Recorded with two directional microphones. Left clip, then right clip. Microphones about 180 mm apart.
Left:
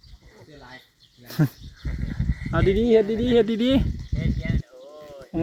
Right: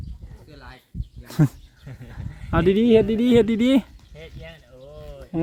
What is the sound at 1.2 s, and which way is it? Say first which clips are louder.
Speech: right 3 dB; 15° right (ahead or behind).